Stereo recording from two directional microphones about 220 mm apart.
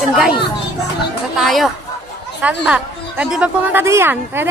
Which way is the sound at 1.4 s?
Centre (ahead or behind).